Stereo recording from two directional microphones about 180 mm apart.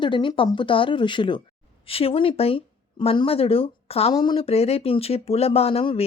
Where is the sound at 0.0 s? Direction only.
25° left (ahead or behind).